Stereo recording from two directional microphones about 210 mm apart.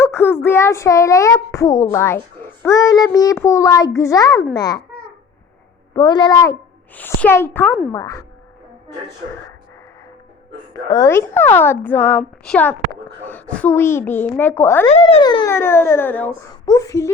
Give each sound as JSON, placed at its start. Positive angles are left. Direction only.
{"t": 0.0, "sound": "a child's voice", "side_deg": 10}
{"t": 5.9, "sound": "speech", "side_deg": 20}
{"t": 10.8, "sound": "speech", "side_deg": 15}
{"t": 14.8, "sound": "speech", "side_deg": 30}